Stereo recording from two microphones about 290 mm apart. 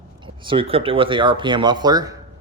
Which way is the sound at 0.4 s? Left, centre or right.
Centre.